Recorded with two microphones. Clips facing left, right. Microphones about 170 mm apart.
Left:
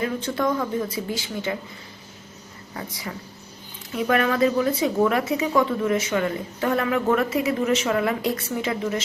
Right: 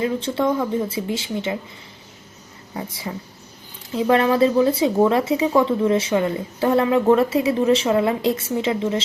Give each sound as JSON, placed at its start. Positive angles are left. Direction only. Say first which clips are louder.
{"t": 0.0, "sound": "speech", "louder": "right 3 dB", "side_deg": -25}
{"t": 2.7, "sound": "speech", "louder": "right 4 dB", "side_deg": -25}